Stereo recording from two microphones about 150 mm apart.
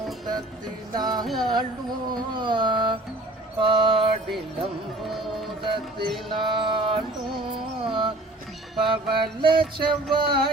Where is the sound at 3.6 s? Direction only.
35° right (ahead or behind).